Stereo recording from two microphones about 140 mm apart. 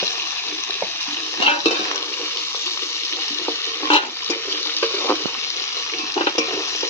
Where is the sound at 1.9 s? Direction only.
20° left (ahead or behind).